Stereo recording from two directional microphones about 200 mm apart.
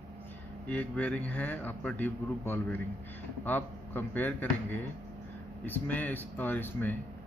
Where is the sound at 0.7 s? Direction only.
5° left (ahead or behind).